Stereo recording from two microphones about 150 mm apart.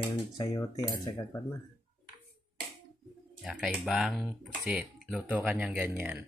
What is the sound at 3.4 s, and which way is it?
Speech, centre (ahead or behind).